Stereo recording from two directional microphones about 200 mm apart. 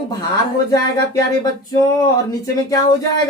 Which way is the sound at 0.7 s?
20° left (ahead or behind).